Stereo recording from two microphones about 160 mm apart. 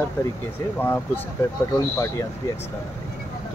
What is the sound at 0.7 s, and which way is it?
Speech, 15° left (ahead or behind).